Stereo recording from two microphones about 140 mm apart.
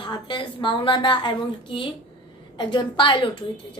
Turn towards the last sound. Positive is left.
turn(degrees=35)  # may be behind; listen again after turning